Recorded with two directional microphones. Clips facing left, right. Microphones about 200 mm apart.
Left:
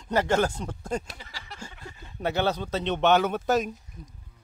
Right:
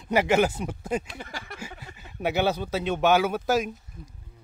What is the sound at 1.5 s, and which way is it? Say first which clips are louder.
Speech: right 2 dB; 10° right (ahead or behind).